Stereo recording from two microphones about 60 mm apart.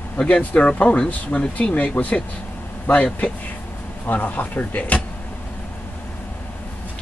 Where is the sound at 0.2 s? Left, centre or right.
Left.